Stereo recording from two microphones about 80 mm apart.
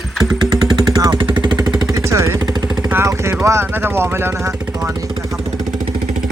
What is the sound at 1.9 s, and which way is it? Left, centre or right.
Vehicle, right.